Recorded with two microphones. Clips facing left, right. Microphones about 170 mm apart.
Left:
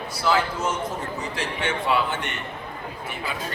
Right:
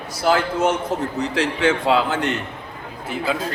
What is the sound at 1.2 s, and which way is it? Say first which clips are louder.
A man's voice: right 11 dB; 75° right (ahead or behind).